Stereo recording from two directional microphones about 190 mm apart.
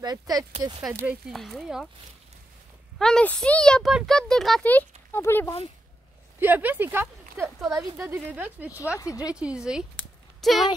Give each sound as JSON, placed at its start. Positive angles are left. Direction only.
{"t": 0.0, "sound": "speech", "side_deg": -20}
{"t": 1.0, "sound": "speech", "side_deg": 0}
{"t": 3.0, "sound": "speech", "side_deg": 5}
{"t": 6.4, "sound": "speech", "side_deg": -10}
{"t": 8.9, "sound": "speech", "side_deg": 15}
{"t": 9.3, "sound": "speech", "side_deg": -5}